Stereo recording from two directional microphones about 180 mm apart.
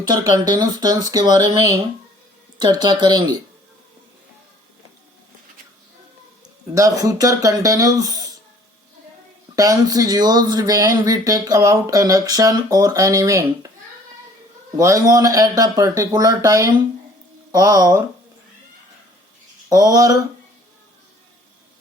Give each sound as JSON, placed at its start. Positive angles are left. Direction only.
{"t": 0.1, "sound": "speech", "side_deg": -20}
{"t": 2.6, "sound": "speech", "side_deg": -25}
{"t": 6.7, "sound": "speech", "side_deg": -20}
{"t": 9.6, "sound": "speech", "side_deg": -20}
{"t": 14.8, "sound": "speech", "side_deg": -20}
{"t": 19.6, "sound": "speech", "side_deg": -20}